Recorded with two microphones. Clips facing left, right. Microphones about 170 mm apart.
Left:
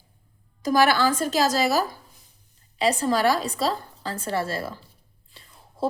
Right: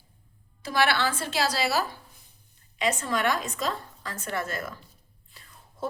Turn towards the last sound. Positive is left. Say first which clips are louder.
# left 2 dB
turn(degrees=30)  # may be behind; listen again after turning